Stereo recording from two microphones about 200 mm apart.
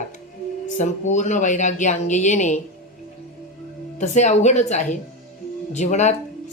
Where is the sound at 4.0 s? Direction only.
35° left (ahead or behind).